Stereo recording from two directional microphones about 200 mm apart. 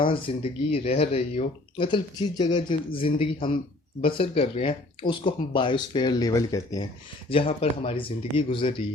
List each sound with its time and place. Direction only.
0.0 s speech: 25° left (ahead or behind)